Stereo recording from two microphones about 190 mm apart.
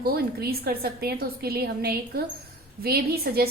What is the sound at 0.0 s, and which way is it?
A woman's voice, 55° right (ahead or behind).